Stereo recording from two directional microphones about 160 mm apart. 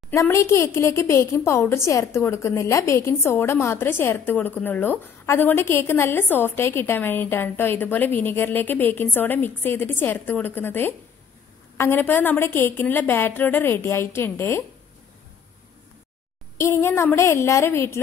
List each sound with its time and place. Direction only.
0.1 s a woman's voice: 20° left (ahead or behind)
16.5 s a woman's voice: 15° left (ahead or behind)